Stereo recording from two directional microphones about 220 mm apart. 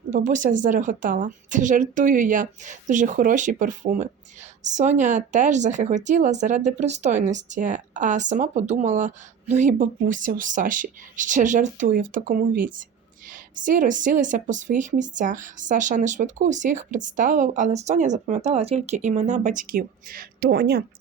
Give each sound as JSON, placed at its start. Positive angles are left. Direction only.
{"t": 0.1, "sound": "speech", "side_deg": -35}